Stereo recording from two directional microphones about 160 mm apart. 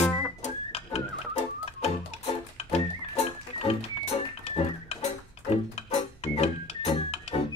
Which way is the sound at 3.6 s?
40° left (ahead or behind).